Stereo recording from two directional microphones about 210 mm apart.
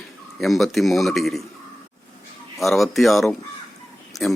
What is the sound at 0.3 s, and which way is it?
Speech, centre (ahead or behind).